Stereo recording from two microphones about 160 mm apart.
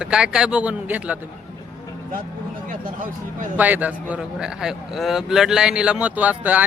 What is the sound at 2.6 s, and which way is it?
Speech, 60° right (ahead or behind).